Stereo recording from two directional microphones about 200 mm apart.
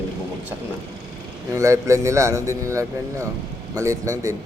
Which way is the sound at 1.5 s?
15° right (ahead or behind).